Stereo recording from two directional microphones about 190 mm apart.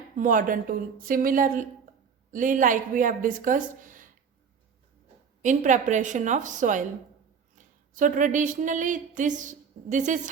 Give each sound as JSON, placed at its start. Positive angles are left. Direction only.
{"t": 0.2, "sound": "a woman's voice", "side_deg": -45}
{"t": 5.4, "sound": "a woman's voice", "side_deg": -40}
{"t": 7.9, "sound": "a woman's voice", "side_deg": -45}